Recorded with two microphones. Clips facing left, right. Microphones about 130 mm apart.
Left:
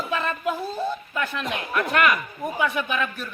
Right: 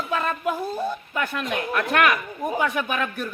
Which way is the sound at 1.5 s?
65° right (ahead or behind).